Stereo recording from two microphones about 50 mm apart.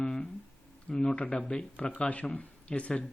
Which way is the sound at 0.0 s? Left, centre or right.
Centre.